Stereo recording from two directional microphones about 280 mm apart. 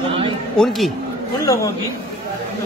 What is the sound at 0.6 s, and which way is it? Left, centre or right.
Speech, centre.